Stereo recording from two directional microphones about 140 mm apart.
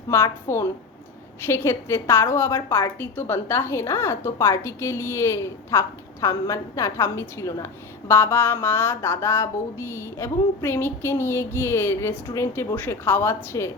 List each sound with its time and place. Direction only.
0.1 s a woman's voice: 20° left (ahead or behind)